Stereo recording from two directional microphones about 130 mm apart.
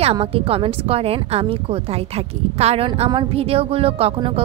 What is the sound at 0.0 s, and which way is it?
Speech, 45° right (ahead or behind).